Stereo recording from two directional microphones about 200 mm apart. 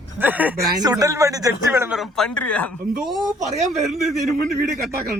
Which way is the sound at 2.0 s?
Centre (ahead or behind).